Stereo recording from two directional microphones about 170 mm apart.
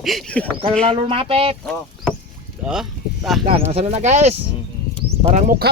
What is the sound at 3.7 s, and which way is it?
Speech, 40° right (ahead or behind).